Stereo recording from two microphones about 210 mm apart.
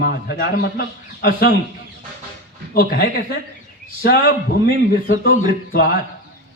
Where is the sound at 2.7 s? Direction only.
50° left (ahead or behind).